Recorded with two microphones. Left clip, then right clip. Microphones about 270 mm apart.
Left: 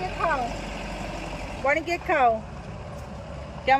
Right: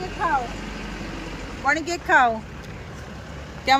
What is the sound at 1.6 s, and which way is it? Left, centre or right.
Speech, right.